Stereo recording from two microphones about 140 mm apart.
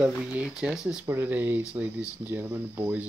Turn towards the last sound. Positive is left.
turn(degrees=-10)  # may be behind; listen again after turning